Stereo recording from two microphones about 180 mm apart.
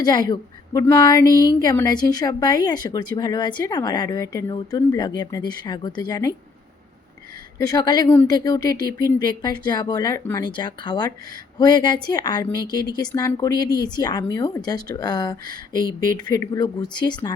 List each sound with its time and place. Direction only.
0.0 s speech: 25° left (ahead or behind)
7.6 s speech: 20° left (ahead or behind)